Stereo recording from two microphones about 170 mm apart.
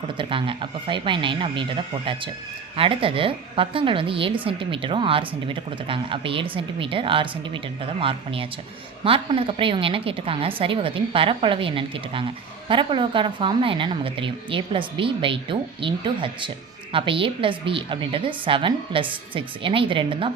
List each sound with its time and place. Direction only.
0.2 s a woman's voice: 30° right (ahead or behind)